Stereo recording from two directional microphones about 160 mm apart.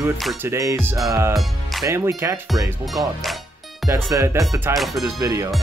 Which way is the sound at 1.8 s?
15° right (ahead or behind).